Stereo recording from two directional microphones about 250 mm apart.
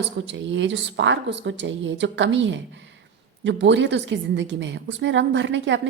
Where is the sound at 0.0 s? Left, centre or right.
Right.